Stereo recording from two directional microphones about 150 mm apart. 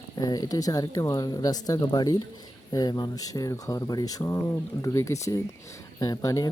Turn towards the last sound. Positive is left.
turn(degrees=25)  # may be behind; listen again after turning